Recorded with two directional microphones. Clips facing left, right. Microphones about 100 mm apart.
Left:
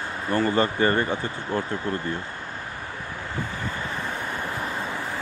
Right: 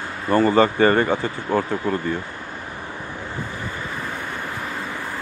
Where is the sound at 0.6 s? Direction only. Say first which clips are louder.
Right 5 dB; 90° right.